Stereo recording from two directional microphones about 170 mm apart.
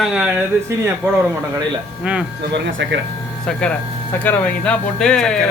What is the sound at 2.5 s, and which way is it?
Speech, 90° right.